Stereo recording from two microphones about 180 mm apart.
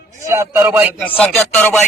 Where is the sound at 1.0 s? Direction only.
10° left (ahead or behind).